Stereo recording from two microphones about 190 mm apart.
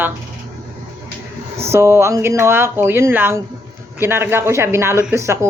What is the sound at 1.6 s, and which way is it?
Speech, 15° right (ahead or behind).